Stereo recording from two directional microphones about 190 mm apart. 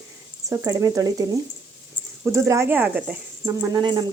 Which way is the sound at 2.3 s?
15° right (ahead or behind).